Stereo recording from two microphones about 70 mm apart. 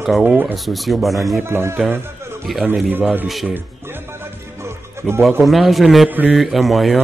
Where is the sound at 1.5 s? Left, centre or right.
Right.